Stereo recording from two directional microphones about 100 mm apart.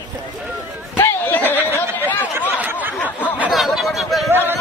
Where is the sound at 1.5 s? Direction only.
20° right (ahead or behind).